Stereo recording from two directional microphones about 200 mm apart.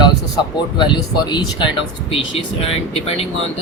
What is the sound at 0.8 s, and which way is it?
Speech, 20° left (ahead or behind).